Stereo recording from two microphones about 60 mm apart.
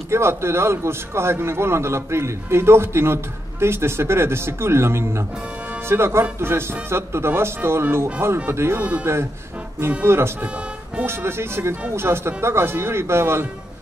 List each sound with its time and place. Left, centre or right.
0.1 s a man's voice: right
8.7 s speech: right
9.8 s a man's voice: right